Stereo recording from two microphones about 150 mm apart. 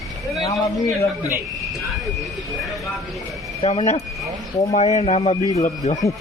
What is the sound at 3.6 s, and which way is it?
Speech, 40° left (ahead or behind).